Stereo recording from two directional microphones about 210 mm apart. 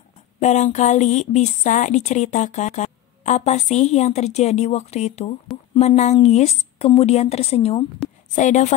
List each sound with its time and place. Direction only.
0.4 s a woman's voice: 35° left (ahead or behind)